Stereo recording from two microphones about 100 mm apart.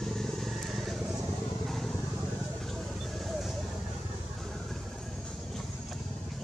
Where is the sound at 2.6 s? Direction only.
Centre (ahead or behind).